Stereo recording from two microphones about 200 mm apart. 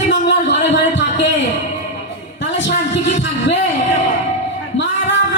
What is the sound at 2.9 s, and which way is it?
Music, 65° left (ahead or behind).